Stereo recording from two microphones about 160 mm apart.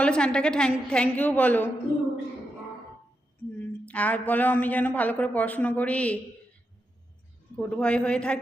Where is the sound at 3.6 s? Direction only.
10° left (ahead or behind).